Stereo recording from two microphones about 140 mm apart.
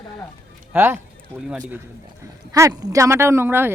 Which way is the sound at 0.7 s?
15° right (ahead or behind).